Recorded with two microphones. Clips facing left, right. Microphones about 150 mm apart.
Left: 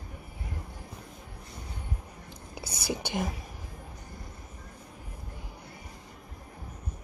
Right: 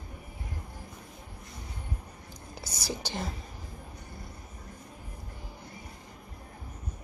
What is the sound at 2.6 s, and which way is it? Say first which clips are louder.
Whispering: left 3 dB; 55° left (ahead or behind).